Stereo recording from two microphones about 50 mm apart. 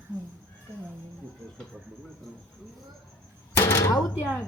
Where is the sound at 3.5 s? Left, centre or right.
Left.